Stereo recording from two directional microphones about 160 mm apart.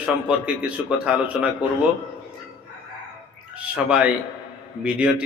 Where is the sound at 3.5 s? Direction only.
5° right (ahead or behind).